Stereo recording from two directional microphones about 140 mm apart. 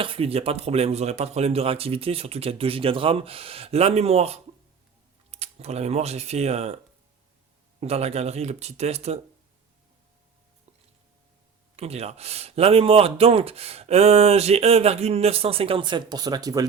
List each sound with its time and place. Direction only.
0.0 s speech: 40° right (ahead or behind)
7.8 s speech: 50° right (ahead or behind)
11.8 s speech: 50° right (ahead or behind); by 16.6 s 25° right (ahead or behind)